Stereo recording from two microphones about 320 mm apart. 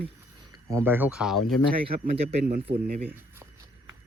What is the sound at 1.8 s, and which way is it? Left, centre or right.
Speech, centre.